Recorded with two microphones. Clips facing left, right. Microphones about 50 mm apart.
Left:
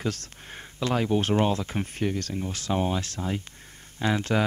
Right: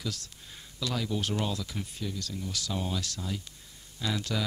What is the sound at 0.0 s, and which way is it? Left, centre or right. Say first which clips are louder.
Speech: left 7 dB; left.